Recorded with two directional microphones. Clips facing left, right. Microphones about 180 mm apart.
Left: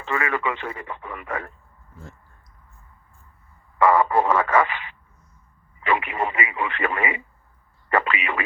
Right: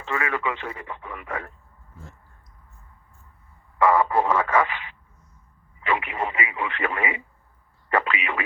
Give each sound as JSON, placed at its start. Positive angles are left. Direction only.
{"t": 0.0, "sound": "radio", "side_deg": 55}
{"t": 3.8, "sound": "radio", "side_deg": 55}
{"t": 7.9, "sound": "a sound", "side_deg": 55}